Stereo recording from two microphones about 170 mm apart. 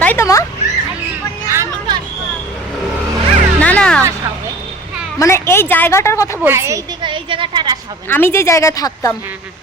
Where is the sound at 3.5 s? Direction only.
10° left (ahead or behind).